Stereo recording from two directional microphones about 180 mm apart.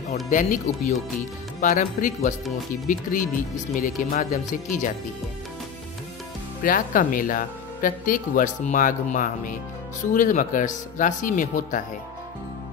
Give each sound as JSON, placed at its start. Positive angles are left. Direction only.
{"t": 0.1, "sound": "speech", "side_deg": 45}
{"t": 6.6, "sound": "speech", "side_deg": 50}